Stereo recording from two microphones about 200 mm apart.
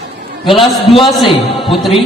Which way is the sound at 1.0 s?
Centre (ahead or behind).